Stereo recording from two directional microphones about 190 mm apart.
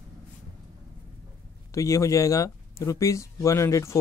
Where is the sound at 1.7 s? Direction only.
15° left (ahead or behind).